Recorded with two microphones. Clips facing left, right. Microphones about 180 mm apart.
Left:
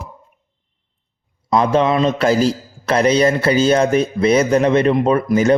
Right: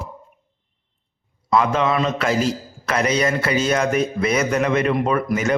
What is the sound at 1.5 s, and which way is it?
A man's voice, 35° left (ahead or behind).